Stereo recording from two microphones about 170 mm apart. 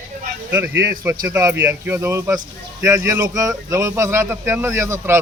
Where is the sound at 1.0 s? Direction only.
15° right (ahead or behind).